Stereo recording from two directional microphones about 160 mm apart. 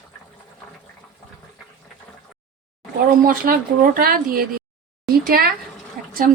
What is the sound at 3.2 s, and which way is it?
Speech, 60° right (ahead or behind).